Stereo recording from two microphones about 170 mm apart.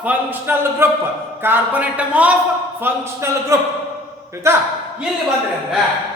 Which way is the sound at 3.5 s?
15° right (ahead or behind).